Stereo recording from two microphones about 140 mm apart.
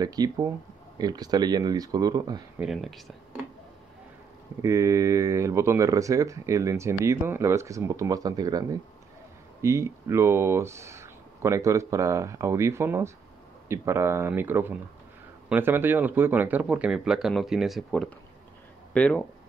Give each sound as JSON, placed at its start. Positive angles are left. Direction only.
{"t": 0.0, "sound": "speech", "side_deg": -25}
{"t": 2.6, "sound": "speech", "side_deg": 0}
{"t": 4.6, "sound": "speech", "side_deg": -20}
{"t": 18.9, "sound": "speech", "side_deg": 10}